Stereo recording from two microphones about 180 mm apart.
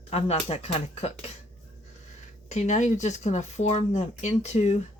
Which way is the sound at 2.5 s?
40° left (ahead or behind).